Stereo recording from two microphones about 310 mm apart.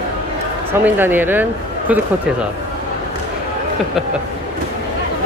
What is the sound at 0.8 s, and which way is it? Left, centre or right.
Speech, centre.